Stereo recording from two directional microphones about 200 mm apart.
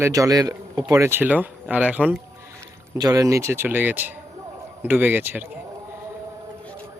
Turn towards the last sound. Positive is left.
turn(degrees=-10)  # may be behind; listen again after turning